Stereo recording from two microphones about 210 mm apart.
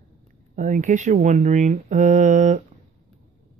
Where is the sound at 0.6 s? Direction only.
35° right (ahead or behind).